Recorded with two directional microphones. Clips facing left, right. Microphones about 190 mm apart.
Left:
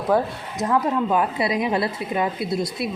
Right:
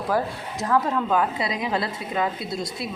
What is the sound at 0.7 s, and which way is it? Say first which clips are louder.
A woman's voice: left 1 dB; 20° left (ahead or behind).